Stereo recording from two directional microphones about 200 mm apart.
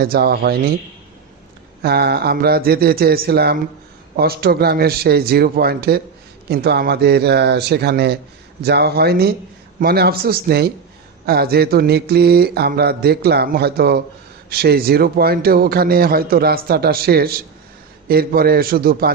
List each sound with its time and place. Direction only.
0.0 s a man's voice: 50° right (ahead or behind)
1.8 s a man's voice: 50° right (ahead or behind)